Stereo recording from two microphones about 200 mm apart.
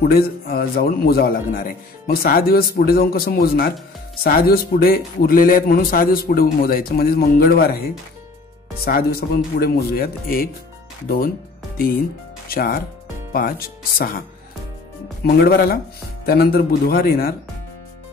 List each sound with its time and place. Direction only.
0.0 s a man's voice: 50° left (ahead or behind)
15.2 s a man's voice: 50° left (ahead or behind)